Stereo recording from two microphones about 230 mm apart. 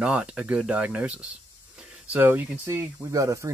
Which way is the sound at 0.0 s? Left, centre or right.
Centre.